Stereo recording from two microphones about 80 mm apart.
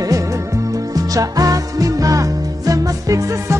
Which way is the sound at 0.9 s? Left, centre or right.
Right.